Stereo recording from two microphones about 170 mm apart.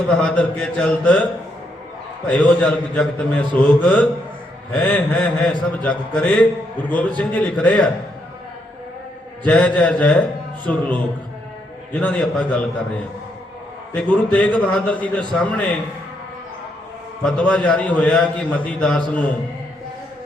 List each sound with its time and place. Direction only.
0.1 s a man's voice: 5° left (ahead or behind)
9.4 s a man's voice: 10° left (ahead or behind)
13.9 s a man's voice: 5° left (ahead or behind)
17.2 s a man's voice: 5° left (ahead or behind)